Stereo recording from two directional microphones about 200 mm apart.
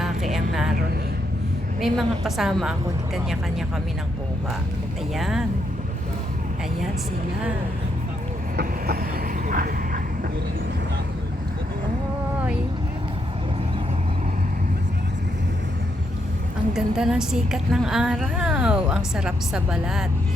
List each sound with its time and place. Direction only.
0.0 s a sound: centre (ahead or behind)
1.8 s a woman's voice: centre (ahead or behind)
5.1 s a woman's voice: centre (ahead or behind)
8.5 s vehicle: 50° right (ahead or behind)
16.7 s a woman's voice: 5° right (ahead or behind)